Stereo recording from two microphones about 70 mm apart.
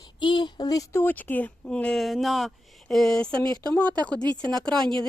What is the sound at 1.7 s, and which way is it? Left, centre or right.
Speech, centre.